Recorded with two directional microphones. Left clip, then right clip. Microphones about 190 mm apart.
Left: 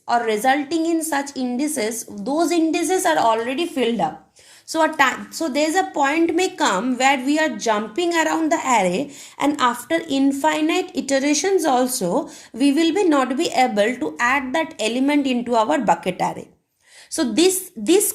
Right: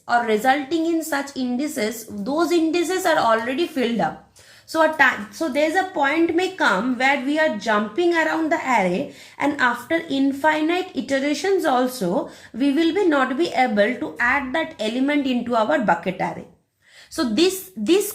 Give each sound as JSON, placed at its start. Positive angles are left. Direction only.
{"t": 0.1, "sound": "a woman's voice", "side_deg": 25}
{"t": 4.7, "sound": "a woman's voice", "side_deg": 30}